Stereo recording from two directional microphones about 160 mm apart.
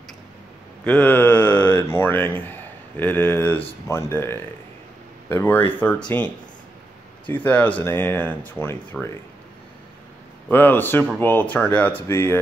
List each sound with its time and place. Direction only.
0.8 s speech: 10° left (ahead or behind)
9.0 s speech: centre (ahead or behind)
10.5 s speech: 10° left (ahead or behind)